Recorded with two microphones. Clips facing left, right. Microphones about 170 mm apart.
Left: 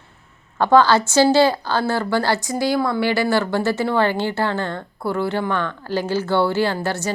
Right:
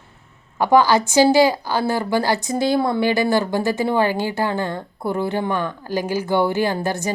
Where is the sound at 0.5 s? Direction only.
15° right (ahead or behind).